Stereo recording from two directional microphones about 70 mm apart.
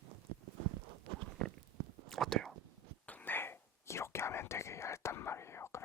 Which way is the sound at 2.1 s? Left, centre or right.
Centre.